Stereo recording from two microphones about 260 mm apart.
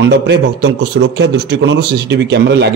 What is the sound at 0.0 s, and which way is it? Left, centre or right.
A man's voice, right.